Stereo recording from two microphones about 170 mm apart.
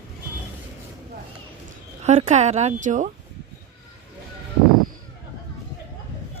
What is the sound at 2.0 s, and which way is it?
A woman's voice, 40° right (ahead or behind).